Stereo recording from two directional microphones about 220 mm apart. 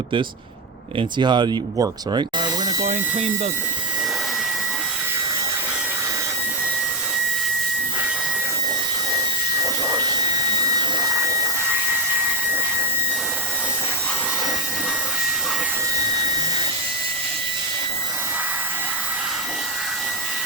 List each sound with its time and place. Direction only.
0.9 s speech: 20° right (ahead or behind)
2.8 s a sound: 35° right (ahead or behind)
9.8 s vacuum cleaner: 15° right (ahead or behind)